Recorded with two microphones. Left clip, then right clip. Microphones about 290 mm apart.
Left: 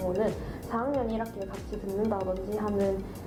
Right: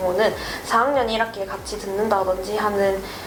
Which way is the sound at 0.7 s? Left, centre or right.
Centre.